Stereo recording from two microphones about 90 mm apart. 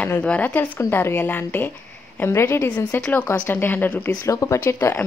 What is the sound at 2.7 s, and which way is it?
A woman's voice, 15° left (ahead or behind).